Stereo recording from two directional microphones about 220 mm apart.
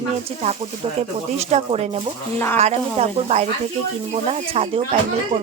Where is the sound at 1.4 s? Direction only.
30° right (ahead or behind).